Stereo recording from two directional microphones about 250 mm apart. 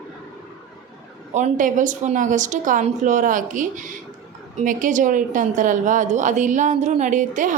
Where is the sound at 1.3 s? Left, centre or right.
Right.